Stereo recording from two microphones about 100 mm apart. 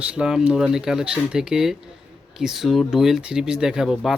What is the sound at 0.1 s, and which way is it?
Speech, 10° right (ahead or behind).